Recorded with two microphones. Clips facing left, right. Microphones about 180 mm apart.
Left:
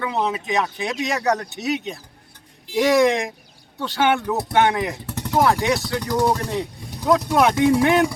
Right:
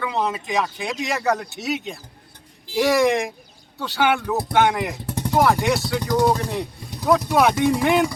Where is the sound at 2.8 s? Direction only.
Centre (ahead or behind).